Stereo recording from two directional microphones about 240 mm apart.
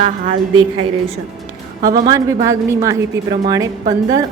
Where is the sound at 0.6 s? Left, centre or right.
Right.